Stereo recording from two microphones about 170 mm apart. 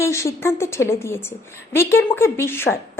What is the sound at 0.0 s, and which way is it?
Speech, 15° left (ahead or behind).